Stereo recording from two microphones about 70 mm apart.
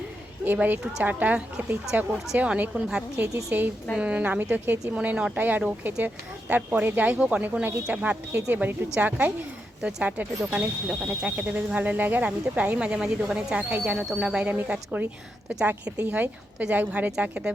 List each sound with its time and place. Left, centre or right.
0.4 s a woman's voice: right
3.5 s speech: right
4.9 s a woman's voice: centre